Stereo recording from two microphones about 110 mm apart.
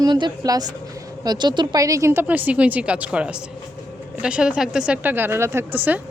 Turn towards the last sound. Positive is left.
turn(degrees=-15)  # may be behind; listen again after turning